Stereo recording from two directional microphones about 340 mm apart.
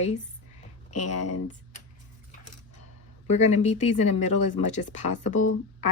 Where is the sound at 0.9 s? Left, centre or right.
Left.